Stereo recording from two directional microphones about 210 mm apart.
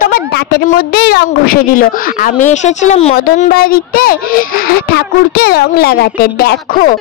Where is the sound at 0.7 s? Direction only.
45° left (ahead or behind); by 3.2 s 30° left (ahead or behind).